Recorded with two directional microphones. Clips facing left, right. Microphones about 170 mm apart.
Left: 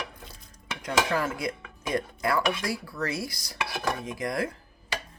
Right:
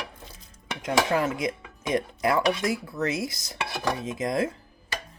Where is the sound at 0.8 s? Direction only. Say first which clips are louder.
Right 3 dB; 20° right (ahead or behind).